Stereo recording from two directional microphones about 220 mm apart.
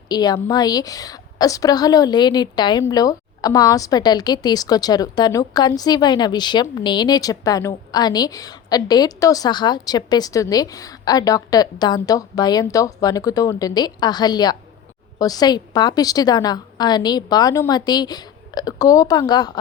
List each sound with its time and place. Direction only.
0.1 s a woman's voice: 20° left (ahead or behind)